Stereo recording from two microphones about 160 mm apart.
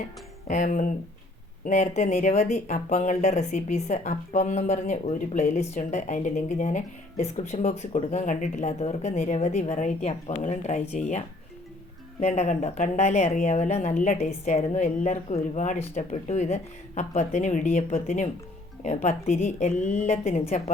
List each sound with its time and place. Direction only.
0.4 s speech: 50° left (ahead or behind)
12.2 s speech: 45° left (ahead or behind)